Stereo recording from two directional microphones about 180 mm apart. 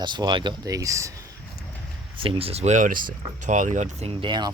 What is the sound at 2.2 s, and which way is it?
Speech, 35° right (ahead or behind).